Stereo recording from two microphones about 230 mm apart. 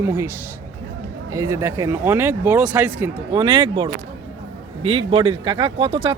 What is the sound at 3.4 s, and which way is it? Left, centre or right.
Speech, right.